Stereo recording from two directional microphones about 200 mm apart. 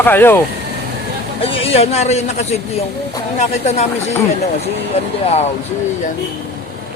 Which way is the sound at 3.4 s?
30° left (ahead or behind).